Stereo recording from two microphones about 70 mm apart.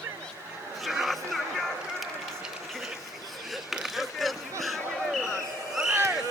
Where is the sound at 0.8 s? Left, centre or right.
Centre.